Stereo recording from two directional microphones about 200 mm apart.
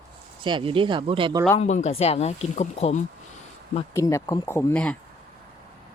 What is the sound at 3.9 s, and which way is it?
Speech, 15° left (ahead or behind).